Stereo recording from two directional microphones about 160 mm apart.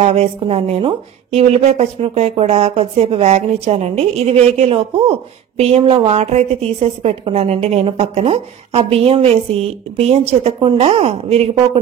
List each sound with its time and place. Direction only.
0.0 s a woman's voice: 40° right (ahead or behind)